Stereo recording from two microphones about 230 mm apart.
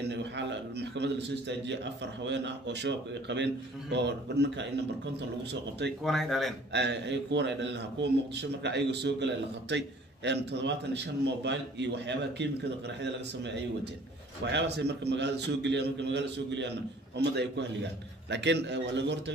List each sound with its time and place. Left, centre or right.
0.1 s a man's voice: right
6.0 s speech: centre
6.7 s a man's voice: right
14.4 s a man's voice: right